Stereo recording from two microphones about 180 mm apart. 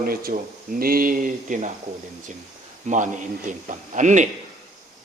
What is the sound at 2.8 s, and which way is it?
Speech, 45° right (ahead or behind).